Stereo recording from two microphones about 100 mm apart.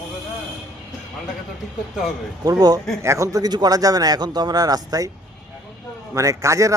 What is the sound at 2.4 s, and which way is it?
A man's voice, 40° right (ahead or behind).